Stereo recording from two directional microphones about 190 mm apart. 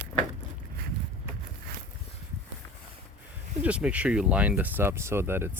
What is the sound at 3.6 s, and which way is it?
Speech, 5° right (ahead or behind).